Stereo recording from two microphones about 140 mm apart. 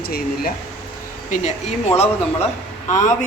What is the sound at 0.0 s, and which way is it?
Speech, 90° left.